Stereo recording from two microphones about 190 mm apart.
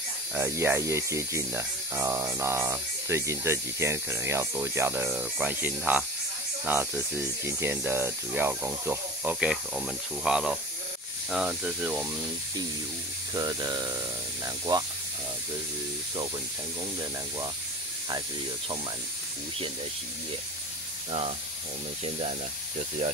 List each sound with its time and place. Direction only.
0.3 s speech: 15° right (ahead or behind)
13.3 s speech: 20° right (ahead or behind)